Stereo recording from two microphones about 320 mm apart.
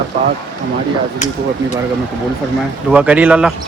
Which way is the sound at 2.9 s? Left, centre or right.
Centre.